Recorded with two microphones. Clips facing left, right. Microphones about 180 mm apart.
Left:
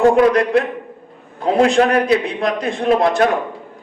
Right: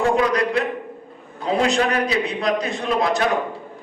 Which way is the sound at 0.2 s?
50° left (ahead or behind).